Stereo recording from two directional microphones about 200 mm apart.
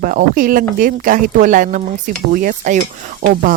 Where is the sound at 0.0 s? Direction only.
45° right (ahead or behind).